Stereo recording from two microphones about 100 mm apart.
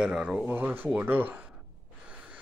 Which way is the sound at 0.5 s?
20° right (ahead or behind).